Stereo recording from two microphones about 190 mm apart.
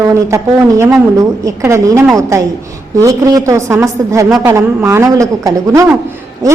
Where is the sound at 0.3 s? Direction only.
15° right (ahead or behind).